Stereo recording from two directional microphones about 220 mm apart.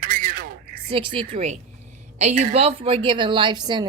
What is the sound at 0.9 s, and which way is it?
A woman's voice, 25° right (ahead or behind).